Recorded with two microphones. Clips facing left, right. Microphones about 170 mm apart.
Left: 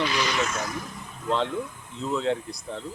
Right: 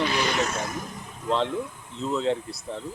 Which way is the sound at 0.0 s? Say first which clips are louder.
Right 1 dB; 50° right (ahead or behind).